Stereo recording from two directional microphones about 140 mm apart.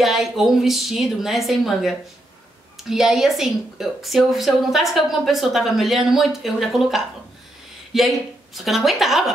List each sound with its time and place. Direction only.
0.0 s speech: centre (ahead or behind)